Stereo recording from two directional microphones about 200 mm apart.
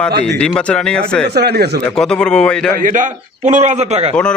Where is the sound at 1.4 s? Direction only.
55° right (ahead or behind).